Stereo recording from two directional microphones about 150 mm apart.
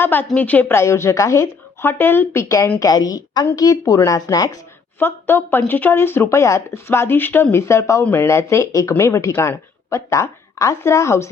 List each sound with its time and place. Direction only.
0.0 s a woman's voice: 10° left (ahead or behind)